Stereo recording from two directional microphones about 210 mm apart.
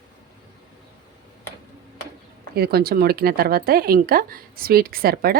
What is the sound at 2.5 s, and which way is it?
A woman's voice, 45° right (ahead or behind).